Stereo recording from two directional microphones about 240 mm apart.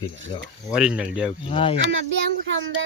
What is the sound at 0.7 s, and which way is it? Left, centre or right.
Speech, centre.